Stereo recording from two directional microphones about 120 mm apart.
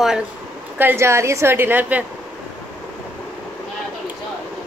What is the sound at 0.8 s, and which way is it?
A woman's voice, 20° right (ahead or behind).